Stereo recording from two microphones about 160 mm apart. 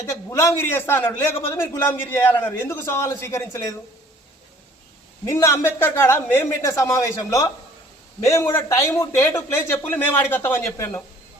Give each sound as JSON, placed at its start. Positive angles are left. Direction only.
{"t": 0.0, "sound": "a man's voice", "side_deg": 15}
{"t": 5.2, "sound": "a man's voice", "side_deg": 15}